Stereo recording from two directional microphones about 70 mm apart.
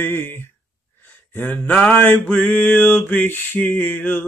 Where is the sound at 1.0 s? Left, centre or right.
Left.